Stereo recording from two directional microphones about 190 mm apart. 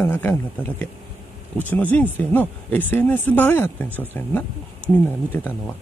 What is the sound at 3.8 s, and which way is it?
Speech, 10° right (ahead or behind).